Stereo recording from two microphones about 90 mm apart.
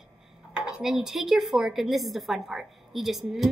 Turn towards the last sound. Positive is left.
turn(degrees=0)  # may be behind; listen again after turning